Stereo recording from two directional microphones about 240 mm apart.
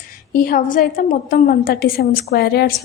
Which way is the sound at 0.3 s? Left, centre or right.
Left.